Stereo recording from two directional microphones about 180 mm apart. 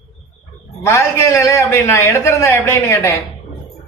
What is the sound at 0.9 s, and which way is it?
A man's voice, 15° left (ahead or behind).